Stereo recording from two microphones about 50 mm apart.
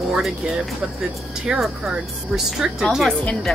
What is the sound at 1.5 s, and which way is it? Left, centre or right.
Speech, centre.